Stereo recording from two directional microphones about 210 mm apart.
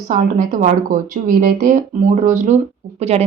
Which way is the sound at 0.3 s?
40° right (ahead or behind).